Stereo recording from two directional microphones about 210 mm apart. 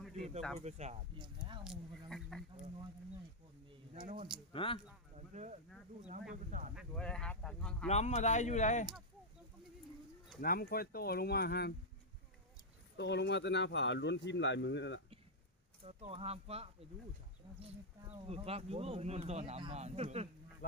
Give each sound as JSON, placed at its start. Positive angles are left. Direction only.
{"t": 0.6, "sound": "speech", "side_deg": -30}
{"t": 1.6, "sound": "speech", "side_deg": 0}
{"t": 4.5, "sound": "speech", "side_deg": 25}
{"t": 5.1, "sound": "a sound", "side_deg": -35}
{"t": 6.5, "sound": "speech", "side_deg": -35}
{"t": 6.7, "sound": "speech", "side_deg": 5}
{"t": 7.9, "sound": "speech", "side_deg": 30}
{"t": 10.4, "sound": "speech", "side_deg": 45}
{"t": 13.0, "sound": "speech", "side_deg": 55}
{"t": 15.8, "sound": "speech", "side_deg": -30}
{"t": 18.3, "sound": "speech", "side_deg": -30}